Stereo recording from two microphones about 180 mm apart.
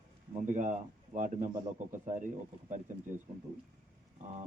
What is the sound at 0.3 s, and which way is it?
Speech, 45° right (ahead or behind).